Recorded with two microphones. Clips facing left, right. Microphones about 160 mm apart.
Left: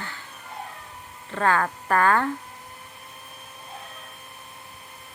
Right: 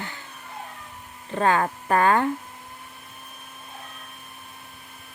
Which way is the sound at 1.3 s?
20° right (ahead or behind).